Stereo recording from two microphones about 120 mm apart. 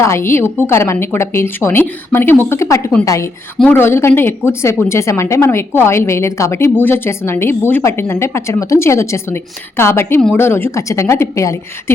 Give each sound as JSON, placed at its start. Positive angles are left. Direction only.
{"t": 0.0, "sound": "a woman's voice", "side_deg": 20}